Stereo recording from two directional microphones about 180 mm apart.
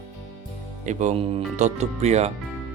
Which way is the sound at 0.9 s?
40° right (ahead or behind).